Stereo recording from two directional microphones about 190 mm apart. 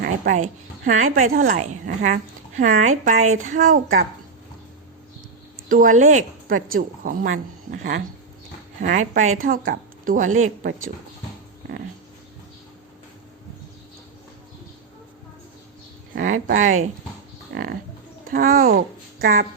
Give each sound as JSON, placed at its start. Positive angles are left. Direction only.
{"t": 0.0, "sound": "a woman's voice", "side_deg": -45}
{"t": 1.5, "sound": "a woman's voice", "side_deg": -40}
{"t": 5.6, "sound": "a woman's voice", "side_deg": -45}
{"t": 16.1, "sound": "a woman's voice", "side_deg": -45}
{"t": 17.5, "sound": "livestock", "side_deg": -55}
{"t": 18.3, "sound": "a woman's voice", "side_deg": -50}